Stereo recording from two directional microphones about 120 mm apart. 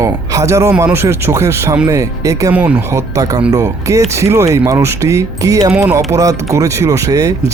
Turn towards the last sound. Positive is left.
turn(degrees=-30)  # may be behind; listen again after turning